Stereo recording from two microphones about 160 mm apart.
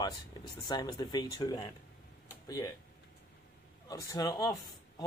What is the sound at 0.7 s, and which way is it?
Speech, 25° left (ahead or behind).